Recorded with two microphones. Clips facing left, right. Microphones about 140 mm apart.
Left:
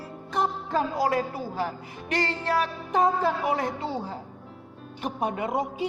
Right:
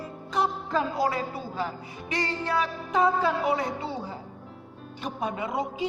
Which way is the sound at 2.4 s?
60° left (ahead or behind).